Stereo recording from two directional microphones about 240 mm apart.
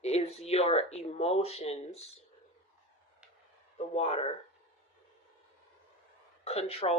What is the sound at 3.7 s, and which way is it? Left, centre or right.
Speech, left.